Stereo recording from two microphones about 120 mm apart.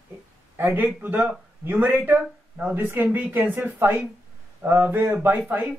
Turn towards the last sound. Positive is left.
turn(degrees=-15)  # may be behind; listen again after turning